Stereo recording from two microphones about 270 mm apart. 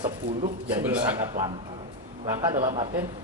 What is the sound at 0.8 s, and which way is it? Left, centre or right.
Speech, centre.